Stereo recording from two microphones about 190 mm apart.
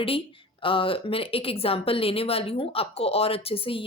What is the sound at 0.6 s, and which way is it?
A woman's voice, 25° left (ahead or behind).